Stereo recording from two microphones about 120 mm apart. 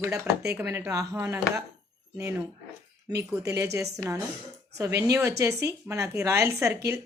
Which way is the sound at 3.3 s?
25° right (ahead or behind).